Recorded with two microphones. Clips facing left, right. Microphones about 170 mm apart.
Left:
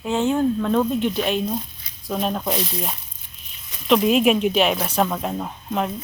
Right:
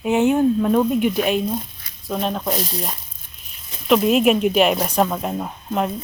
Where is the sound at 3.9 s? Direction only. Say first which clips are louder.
Right 1 dB; 5° right (ahead or behind).